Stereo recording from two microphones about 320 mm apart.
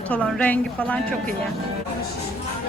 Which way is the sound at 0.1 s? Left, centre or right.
Centre.